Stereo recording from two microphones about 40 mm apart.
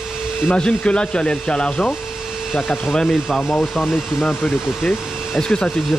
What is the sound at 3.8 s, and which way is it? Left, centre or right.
Speech, centre.